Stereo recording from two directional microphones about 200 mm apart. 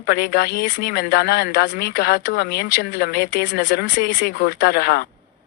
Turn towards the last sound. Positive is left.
turn(degrees=50)  # may be behind; listen again after turning